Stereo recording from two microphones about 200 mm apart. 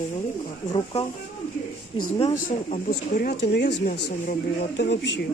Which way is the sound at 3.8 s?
40° left (ahead or behind).